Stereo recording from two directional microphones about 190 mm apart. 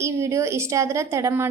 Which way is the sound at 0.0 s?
15° right (ahead or behind).